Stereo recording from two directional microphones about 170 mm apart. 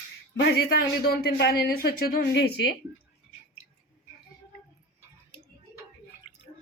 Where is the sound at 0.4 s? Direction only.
70° left (ahead or behind).